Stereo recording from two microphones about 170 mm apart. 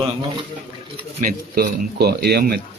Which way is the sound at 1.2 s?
55° right (ahead or behind).